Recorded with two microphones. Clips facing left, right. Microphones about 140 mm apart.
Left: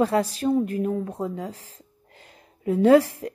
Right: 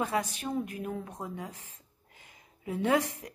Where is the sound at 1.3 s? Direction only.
70° left (ahead or behind).